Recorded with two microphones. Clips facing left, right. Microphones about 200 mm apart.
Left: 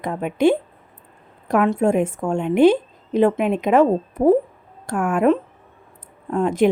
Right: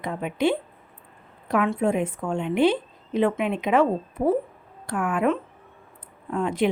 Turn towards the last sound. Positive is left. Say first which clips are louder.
# left 6 dB
turn(degrees=45)  # may be behind; listen again after turning